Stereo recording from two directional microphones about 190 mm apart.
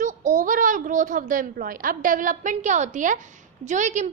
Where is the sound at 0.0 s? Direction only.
40° right (ahead or behind).